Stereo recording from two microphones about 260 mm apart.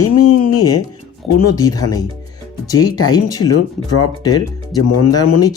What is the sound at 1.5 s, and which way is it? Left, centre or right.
Speech, centre.